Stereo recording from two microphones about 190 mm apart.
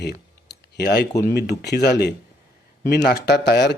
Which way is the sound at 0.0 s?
60° left (ahead or behind).